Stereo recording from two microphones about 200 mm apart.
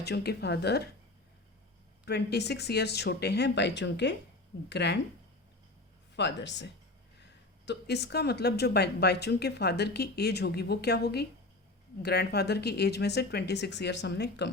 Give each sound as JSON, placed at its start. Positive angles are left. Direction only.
{"t": 0.0, "sound": "speech", "side_deg": 55}
{"t": 2.0, "sound": "speech", "side_deg": 55}
{"t": 6.1, "sound": "speech", "side_deg": 60}